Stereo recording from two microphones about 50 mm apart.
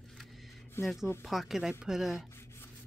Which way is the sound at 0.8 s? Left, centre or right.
Left.